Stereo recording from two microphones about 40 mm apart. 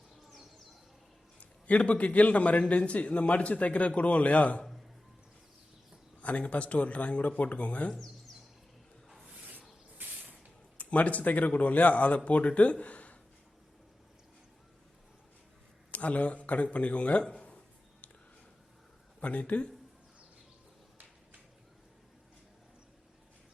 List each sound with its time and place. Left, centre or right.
1.4 s a man's voice: left
6.2 s a man's voice: left
7.9 s a sound: centre
10.0 s spray: right
10.8 s a man's voice: left
15.9 s a man's voice: left
17.3 s a sound: left
19.2 s a man's voice: left